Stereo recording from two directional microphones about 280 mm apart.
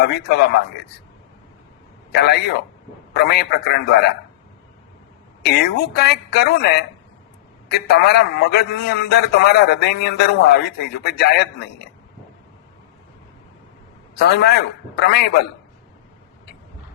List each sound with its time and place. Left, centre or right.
0.0 s a man's voice: left
2.1 s a man's voice: left
5.5 s a man's voice: left
14.2 s a man's voice: left